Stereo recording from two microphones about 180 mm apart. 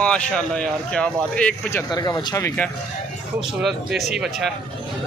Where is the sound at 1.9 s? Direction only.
20° left (ahead or behind).